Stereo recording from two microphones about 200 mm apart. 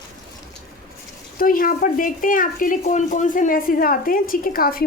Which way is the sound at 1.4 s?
45° left (ahead or behind).